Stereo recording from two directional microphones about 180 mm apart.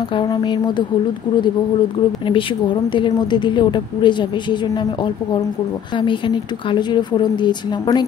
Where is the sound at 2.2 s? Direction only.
25° left (ahead or behind).